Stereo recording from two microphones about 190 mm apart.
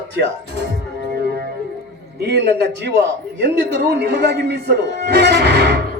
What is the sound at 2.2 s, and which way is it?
A man's voice, 60° right (ahead or behind).